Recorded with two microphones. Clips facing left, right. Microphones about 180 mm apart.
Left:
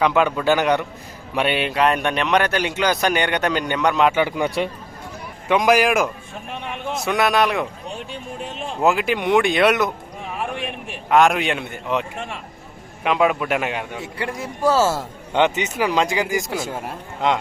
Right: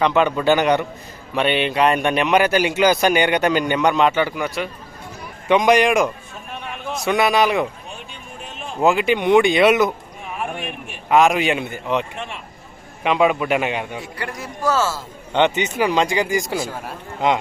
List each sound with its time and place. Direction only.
0.0 s a man's voice: 5° left (ahead or behind); by 4.7 s 25° left (ahead or behind)
5.5 s a man's voice: 5° left (ahead or behind)
8.8 s a man's voice: centre (ahead or behind)
11.1 s a man's voice: centre (ahead or behind)
14.0 s a man's voice: 25° left (ahead or behind)
15.3 s a man's voice: 5° left (ahead or behind)